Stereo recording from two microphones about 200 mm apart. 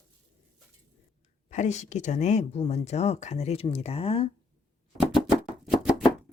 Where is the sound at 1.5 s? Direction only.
35° left (ahead or behind).